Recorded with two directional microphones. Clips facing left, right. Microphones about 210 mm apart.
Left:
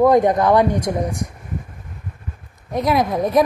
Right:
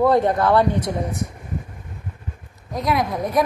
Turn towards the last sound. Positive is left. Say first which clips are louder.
# left 4 dB
turn(degrees=25)  # may be behind; listen again after turning